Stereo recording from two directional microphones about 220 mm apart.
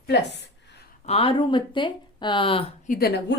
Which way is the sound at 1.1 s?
25° left (ahead or behind).